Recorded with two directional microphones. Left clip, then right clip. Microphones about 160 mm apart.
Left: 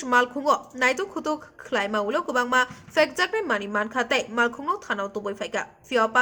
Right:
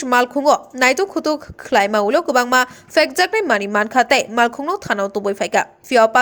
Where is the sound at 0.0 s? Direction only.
30° right (ahead or behind).